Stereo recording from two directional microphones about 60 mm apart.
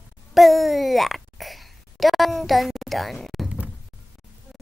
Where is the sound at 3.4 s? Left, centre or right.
Right.